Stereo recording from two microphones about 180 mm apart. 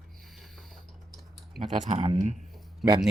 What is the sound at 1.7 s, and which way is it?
Speech, 40° right (ahead or behind).